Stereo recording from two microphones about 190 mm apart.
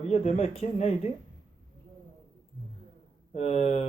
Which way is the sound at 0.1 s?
35° left (ahead or behind).